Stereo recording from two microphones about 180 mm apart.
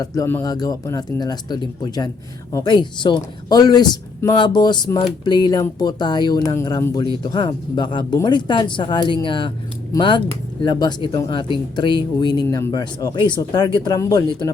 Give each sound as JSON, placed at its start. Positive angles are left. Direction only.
{"t": 0.0, "sound": "speech", "side_deg": 20}